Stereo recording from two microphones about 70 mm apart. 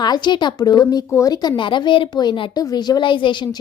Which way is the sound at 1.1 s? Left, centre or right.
Left.